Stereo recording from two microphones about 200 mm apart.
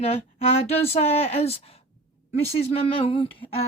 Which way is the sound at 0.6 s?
30° left (ahead or behind).